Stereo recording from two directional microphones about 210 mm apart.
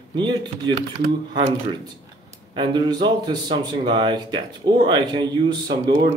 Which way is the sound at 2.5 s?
20° right (ahead or behind).